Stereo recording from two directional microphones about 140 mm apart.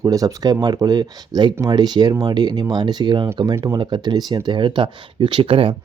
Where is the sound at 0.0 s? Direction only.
25° right (ahead or behind).